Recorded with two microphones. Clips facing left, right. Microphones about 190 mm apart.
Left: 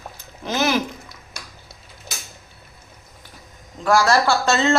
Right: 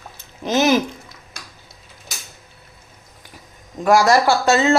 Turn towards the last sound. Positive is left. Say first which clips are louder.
# right 3 dB
turn(degrees=-10)  # may be behind; listen again after turning